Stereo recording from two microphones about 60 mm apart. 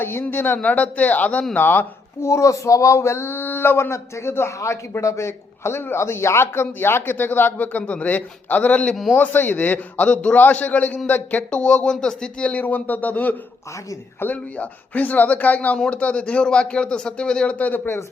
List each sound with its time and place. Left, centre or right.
0.0 s speech: left
2.2 s speech: left
11.6 s speech: centre